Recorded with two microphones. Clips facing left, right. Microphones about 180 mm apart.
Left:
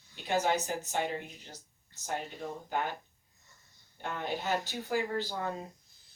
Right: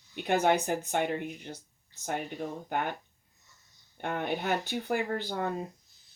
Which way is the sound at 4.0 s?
60° right (ahead or behind).